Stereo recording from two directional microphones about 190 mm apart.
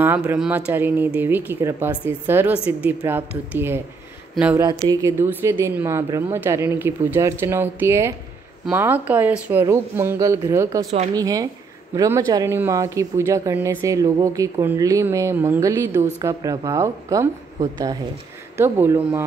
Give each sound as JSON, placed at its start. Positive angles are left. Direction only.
{"t": 0.0, "sound": "speech", "side_deg": -10}
{"t": 4.6, "sound": "speech", "side_deg": -20}